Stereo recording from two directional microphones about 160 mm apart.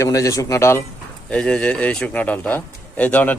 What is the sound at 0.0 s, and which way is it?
Speech, 20° left (ahead or behind).